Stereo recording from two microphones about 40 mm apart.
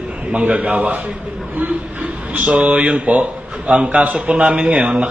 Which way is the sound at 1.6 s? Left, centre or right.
Right.